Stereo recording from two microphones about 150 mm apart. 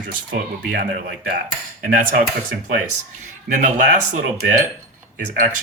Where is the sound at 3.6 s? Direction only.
55° right (ahead or behind).